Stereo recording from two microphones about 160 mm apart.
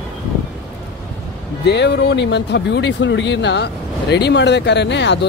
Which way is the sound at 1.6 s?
90° left.